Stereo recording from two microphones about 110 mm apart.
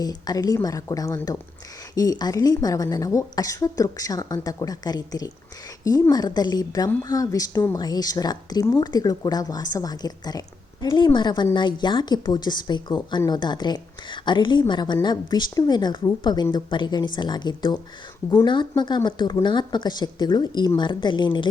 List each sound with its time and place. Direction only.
0.0 s a woman's voice: 35° left (ahead or behind)